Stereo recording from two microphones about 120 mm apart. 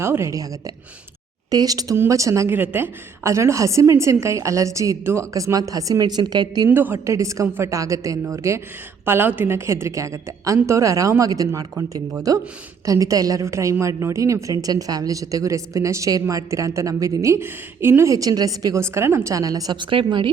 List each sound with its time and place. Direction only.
0.0 s a woman's voice: 20° right (ahead or behind)
1.5 s a woman's voice: 30° right (ahead or behind)
6.7 s a woman's voice: 15° right (ahead or behind); by 20.3 s 40° right (ahead or behind)